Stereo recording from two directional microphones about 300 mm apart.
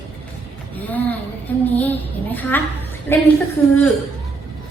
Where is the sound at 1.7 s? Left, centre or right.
Centre.